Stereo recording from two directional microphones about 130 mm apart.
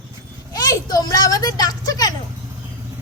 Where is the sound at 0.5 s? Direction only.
30° left (ahead or behind).